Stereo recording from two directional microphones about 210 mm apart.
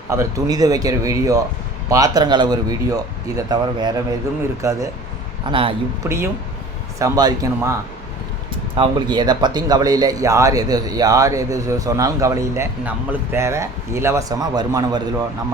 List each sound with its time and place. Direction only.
0.1 s speech: 15° right (ahead or behind)
5.5 s speech: 25° right (ahead or behind)
6.0 s speech: 10° right (ahead or behind)
8.7 s speech: 20° right (ahead or behind)